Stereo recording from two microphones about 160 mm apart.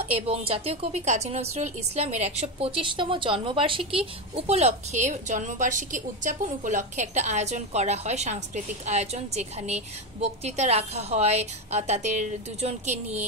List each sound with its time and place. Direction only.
0.0 s a woman's voice: 40° right (ahead or behind)